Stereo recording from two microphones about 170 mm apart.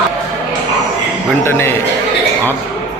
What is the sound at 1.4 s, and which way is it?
Speech, 15° left (ahead or behind).